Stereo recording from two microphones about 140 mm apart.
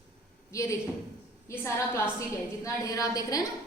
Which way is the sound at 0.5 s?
20° left (ahead or behind).